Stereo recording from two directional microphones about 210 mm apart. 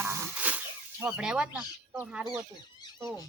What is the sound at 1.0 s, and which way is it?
Speech, 5° right (ahead or behind).